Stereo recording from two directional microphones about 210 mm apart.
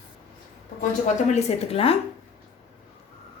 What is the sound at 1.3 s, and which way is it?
Speech, 30° left (ahead or behind).